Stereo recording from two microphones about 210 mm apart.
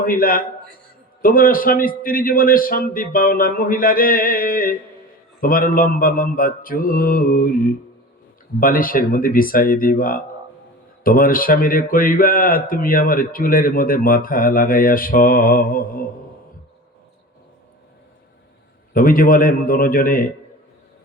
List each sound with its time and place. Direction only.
0.0 s speech: 40° left (ahead or behind)
18.9 s a man's voice: 40° left (ahead or behind)